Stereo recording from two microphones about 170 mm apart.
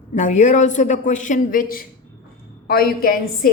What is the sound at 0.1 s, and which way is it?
A woman's voice, 45° left (ahead or behind).